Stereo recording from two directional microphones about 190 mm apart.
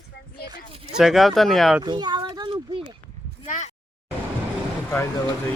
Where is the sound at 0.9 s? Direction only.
Centre (ahead or behind).